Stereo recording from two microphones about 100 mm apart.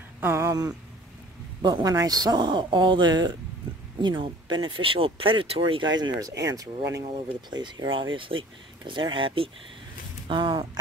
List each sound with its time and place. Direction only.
0.2 s a sound: 25° right (ahead or behind)
0.5 s speech: 35° right (ahead or behind)
7.5 s speech: 50° right (ahead or behind)